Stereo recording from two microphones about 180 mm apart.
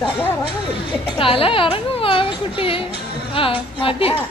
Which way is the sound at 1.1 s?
30° left (ahead or behind).